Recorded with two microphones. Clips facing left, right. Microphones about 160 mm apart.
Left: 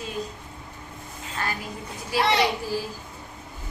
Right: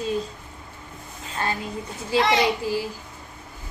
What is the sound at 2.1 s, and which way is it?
Speech, 25° right (ahead or behind).